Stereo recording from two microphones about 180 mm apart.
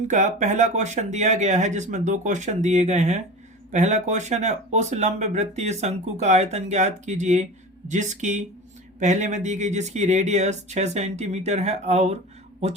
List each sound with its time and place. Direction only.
0.1 s speech: 40° right (ahead or behind)